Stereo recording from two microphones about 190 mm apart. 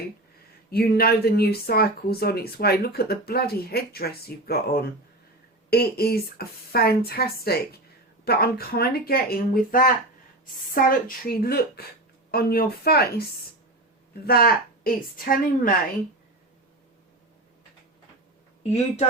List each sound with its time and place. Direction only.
0.7 s speech: 55° left (ahead or behind)
14.3 s speech: 55° left (ahead or behind)